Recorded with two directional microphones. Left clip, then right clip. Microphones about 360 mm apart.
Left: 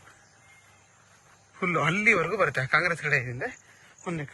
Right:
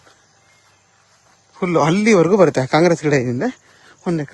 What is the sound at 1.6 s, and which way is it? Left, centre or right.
Speech, centre.